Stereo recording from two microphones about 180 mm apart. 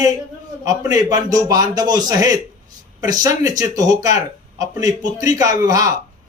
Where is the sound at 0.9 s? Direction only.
20° right (ahead or behind).